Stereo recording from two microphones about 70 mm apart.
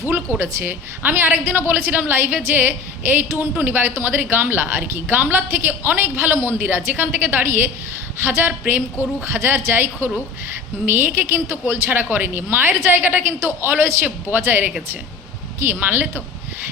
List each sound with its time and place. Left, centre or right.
0.3 s a woman's voice: right
9.2 s a woman's voice: right